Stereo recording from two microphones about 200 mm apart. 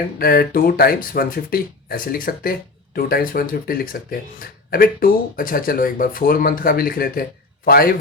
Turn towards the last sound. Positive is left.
turn(degrees=45)  # may be behind; listen again after turning